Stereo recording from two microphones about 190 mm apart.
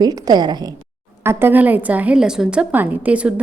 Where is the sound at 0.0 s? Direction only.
20° right (ahead or behind).